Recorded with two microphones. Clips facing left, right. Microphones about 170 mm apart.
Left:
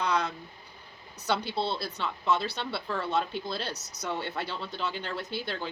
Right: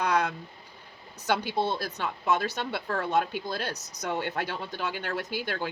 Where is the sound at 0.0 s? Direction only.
60° right (ahead or behind).